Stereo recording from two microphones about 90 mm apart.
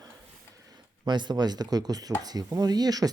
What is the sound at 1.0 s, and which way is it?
Speech, 55° right (ahead or behind).